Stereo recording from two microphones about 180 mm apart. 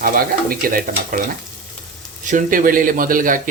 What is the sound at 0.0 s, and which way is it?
Speech, 50° right (ahead or behind).